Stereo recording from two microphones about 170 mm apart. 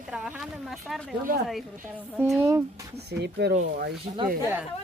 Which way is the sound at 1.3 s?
55° right (ahead or behind).